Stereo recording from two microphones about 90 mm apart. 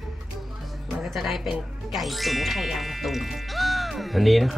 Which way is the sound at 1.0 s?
Centre (ahead or behind).